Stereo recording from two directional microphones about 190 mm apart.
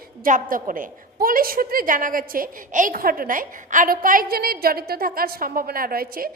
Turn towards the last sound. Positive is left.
turn(degrees=-50)  # may be behind; listen again after turning